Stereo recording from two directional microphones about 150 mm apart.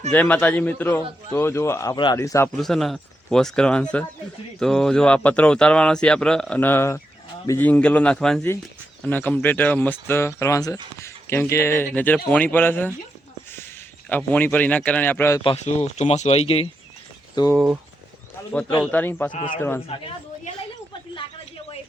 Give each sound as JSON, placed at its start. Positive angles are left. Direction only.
{"t": 0.1, "sound": "speech", "side_deg": 10}
{"t": 2.6, "sound": "speech", "side_deg": 0}
{"t": 14.1, "sound": "speech", "side_deg": 10}
{"t": 15.6, "sound": "speech", "side_deg": 45}
{"t": 17.4, "sound": "speech", "side_deg": 30}
{"t": 18.9, "sound": "speech", "side_deg": 10}
{"t": 19.3, "sound": "a man's voice", "side_deg": 60}